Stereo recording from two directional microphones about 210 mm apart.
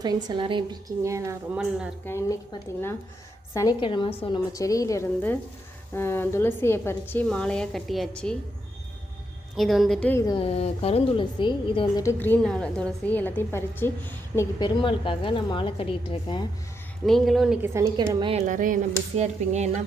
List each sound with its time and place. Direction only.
0.0 s a woman's voice: 20° right (ahead or behind)
2.0 s a woman's voice: 15° left (ahead or behind)
9.6 s a woman's voice: centre (ahead or behind); by 12.0 s 25° left (ahead or behind)
12.0 s a woman's voice: 10° left (ahead or behind)
14.6 s a woman's voice: 25° left (ahead or behind)
17.1 s a woman's voice: centre (ahead or behind)
17.7 s a woman's voice: 15° right (ahead or behind)
18.3 s speech: 35° right (ahead or behind)